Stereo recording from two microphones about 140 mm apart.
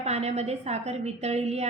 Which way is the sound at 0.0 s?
50° right (ahead or behind).